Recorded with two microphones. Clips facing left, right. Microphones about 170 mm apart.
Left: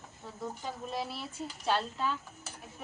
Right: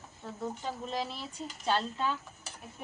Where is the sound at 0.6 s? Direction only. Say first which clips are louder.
Even; 5° left (ahead or behind).